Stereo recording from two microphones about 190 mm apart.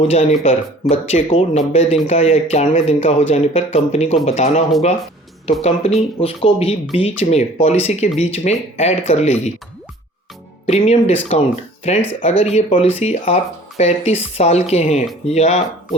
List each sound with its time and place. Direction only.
0.0 s speech: 30° left (ahead or behind)
5.6 s speech: 35° left (ahead or behind)
10.7 s speech: 35° left (ahead or behind)